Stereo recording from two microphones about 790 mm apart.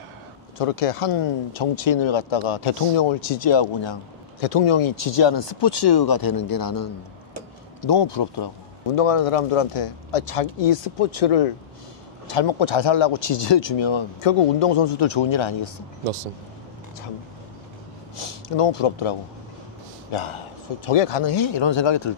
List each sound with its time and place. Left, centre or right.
0.6 s speech: left
8.9 s speech: left
18.1 s speech: left